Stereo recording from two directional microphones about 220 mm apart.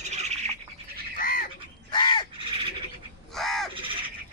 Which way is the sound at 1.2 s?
40° left (ahead or behind).